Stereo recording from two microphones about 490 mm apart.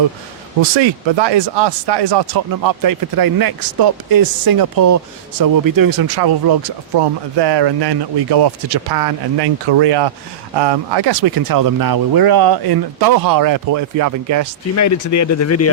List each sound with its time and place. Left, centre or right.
0.6 s speech: right
14.8 s speech: left